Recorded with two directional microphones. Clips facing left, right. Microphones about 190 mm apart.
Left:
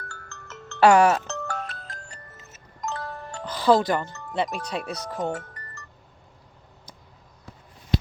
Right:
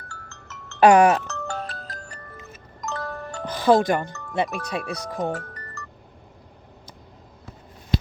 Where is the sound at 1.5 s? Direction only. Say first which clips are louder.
Right 2 dB; 35° right (ahead or behind).